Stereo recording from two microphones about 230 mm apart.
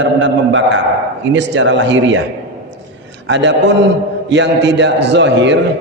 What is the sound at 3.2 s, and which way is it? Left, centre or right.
A man's voice, right.